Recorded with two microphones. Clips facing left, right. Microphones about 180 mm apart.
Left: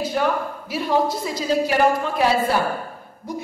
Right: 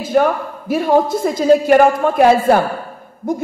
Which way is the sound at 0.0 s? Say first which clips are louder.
Right 7 dB; 50° right (ahead or behind).